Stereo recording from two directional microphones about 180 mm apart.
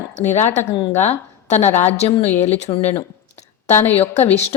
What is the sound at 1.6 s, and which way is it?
Speech, 10° left (ahead or behind).